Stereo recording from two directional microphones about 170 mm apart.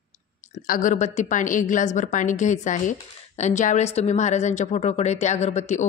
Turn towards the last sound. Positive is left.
turn(degrees=45)  # may be behind; listen again after turning